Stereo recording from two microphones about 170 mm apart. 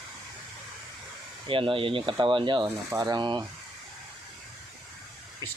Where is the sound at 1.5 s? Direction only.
30° right (ahead or behind).